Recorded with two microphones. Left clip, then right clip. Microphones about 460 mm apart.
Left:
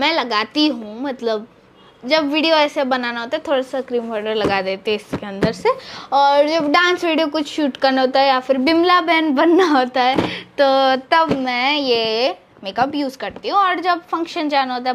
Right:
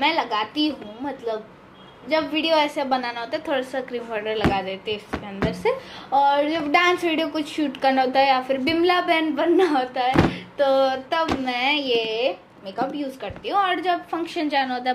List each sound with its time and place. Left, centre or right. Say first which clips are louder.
0.0 s a woman's voice: left 4 dB; left